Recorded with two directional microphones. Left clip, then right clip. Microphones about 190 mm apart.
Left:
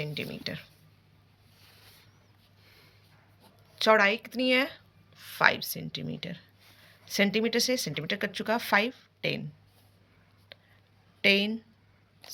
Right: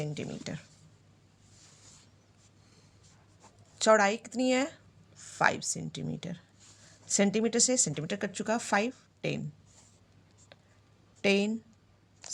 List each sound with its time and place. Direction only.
0.0 s speech: 30° right (ahead or behind)
3.8 s speech: 35° right (ahead or behind)
10.5 s whispering: 35° right (ahead or behind)
11.2 s speech: 40° right (ahead or behind)